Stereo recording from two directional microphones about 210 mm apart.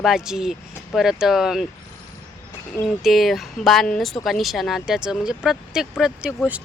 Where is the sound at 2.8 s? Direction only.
Centre (ahead or behind).